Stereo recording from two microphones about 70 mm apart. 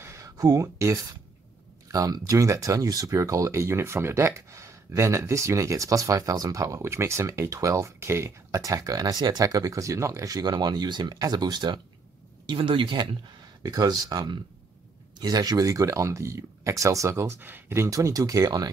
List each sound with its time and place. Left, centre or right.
0.0 s a sound: right
1.9 s speech: right
8.5 s speech: right
11.1 s speech: right
13.0 s speech: right
13.6 s speech: right
17.4 s speech: right
17.7 s speech: right